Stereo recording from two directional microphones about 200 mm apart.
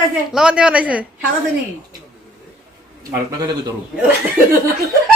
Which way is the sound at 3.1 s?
20° right (ahead or behind).